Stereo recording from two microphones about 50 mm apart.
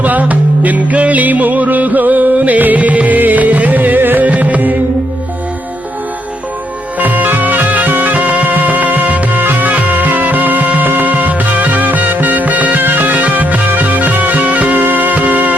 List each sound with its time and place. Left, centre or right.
0.0 s music: right
7.0 s music: right